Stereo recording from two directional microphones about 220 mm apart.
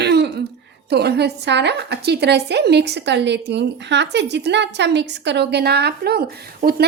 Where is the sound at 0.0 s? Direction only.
50° right (ahead or behind).